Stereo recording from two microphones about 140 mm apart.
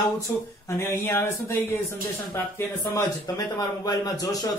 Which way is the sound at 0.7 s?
20° left (ahead or behind).